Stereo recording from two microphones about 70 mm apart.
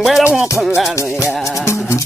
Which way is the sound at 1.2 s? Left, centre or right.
Left.